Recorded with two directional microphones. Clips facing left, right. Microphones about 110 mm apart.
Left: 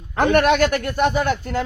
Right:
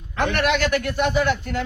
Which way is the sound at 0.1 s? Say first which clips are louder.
Left 5 dB; 40° left (ahead or behind).